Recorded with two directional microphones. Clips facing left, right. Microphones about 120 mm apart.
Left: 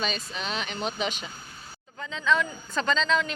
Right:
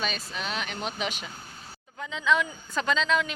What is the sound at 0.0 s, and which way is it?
Speech, 5° right (ahead or behind).